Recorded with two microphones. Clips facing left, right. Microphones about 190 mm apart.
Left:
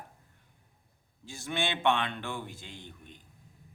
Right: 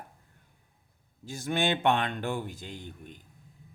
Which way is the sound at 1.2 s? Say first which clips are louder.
Right 4 dB; 40° right (ahead or behind).